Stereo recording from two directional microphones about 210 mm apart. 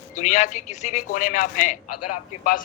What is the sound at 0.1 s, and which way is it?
A man's voice, 35° left (ahead or behind).